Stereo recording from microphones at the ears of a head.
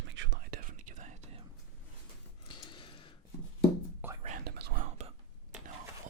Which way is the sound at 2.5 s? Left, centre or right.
Left.